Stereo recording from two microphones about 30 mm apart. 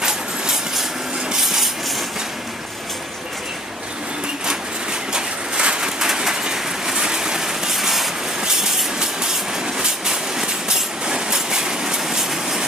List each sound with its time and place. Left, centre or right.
1.4 s wood: centre
5.1 s a sound: right
5.9 s train: centre
7.7 s vehicle: centre
9.0 s train: right